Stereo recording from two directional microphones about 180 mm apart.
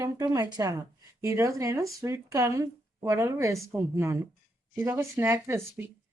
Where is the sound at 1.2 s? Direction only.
15° right (ahead or behind).